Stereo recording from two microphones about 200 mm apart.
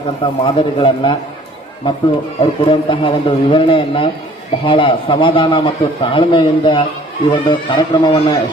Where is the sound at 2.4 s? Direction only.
25° left (ahead or behind).